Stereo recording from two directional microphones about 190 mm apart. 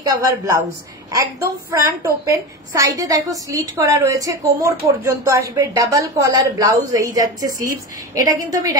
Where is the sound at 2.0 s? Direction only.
15° right (ahead or behind).